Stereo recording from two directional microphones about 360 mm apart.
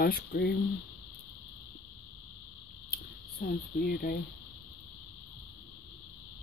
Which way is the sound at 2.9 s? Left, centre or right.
Left.